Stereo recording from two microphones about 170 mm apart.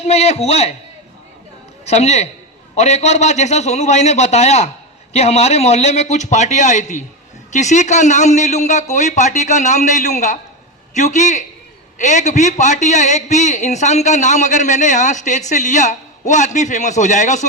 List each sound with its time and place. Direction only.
0.0 s a man's voice: 40° left (ahead or behind)
1.9 s a man's voice: 40° left (ahead or behind)